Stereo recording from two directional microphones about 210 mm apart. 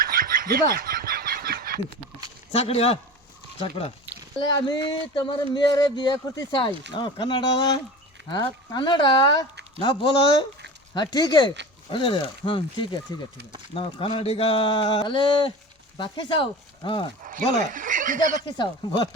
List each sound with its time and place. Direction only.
0.0 s a sound: 45° right (ahead or behind)
2.5 s speech: 30° left (ahead or behind)
4.4 s speech: 25° left (ahead or behind)
8.2 s a sound: 55° right (ahead or behind)
8.7 s speech: 20° left (ahead or behind)
17.2 s speech: 40° right (ahead or behind)
18.5 s speech: 20° left (ahead or behind)